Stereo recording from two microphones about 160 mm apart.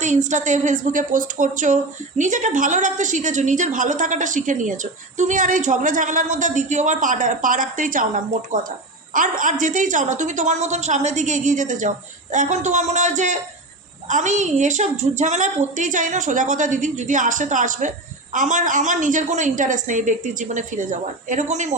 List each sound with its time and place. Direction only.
0.0 s a woman's voice: 50° right (ahead or behind)